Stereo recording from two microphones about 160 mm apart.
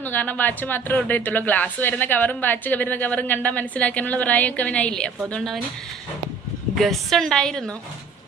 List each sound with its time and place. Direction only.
0.0 s a woman's voice: 10° left (ahead or behind)
6.7 s a woman's voice: centre (ahead or behind)